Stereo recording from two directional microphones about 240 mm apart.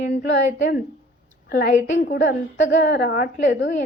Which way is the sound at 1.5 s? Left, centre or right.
Left.